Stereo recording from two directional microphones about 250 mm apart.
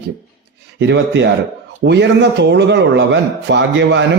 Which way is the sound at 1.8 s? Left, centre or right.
Right.